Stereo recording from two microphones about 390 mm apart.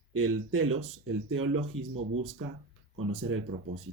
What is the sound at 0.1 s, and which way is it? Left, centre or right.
Speech, right.